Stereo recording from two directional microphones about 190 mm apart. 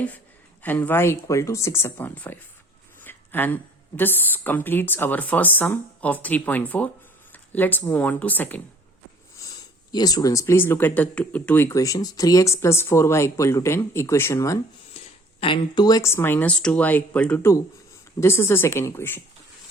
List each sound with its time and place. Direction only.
0.6 s speech: 10° left (ahead or behind)
9.9 s speech: 20° left (ahead or behind)
14.9 s speech: 30° left (ahead or behind); by 19.2 s 10° left (ahead or behind)